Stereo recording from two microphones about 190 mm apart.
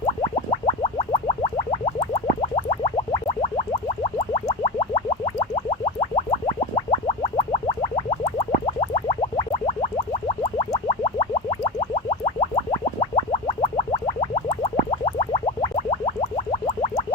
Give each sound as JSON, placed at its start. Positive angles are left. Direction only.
{"t": 0.0, "sound": "music", "side_deg": 30}